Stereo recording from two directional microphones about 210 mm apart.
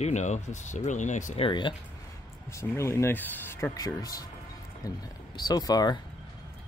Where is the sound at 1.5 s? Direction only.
20° left (ahead or behind).